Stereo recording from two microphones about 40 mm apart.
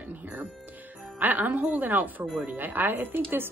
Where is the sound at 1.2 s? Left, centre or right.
Right.